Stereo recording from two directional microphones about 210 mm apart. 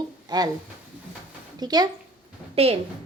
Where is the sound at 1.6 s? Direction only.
20° right (ahead or behind).